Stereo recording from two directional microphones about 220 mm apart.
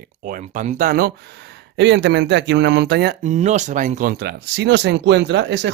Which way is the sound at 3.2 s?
30° right (ahead or behind).